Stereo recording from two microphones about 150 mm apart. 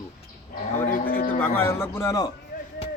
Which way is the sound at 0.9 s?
75° left (ahead or behind).